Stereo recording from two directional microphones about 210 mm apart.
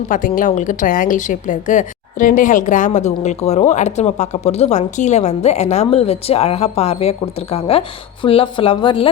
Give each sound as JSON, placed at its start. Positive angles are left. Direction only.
{"t": 0.1, "sound": "a woman's voice", "side_deg": 40}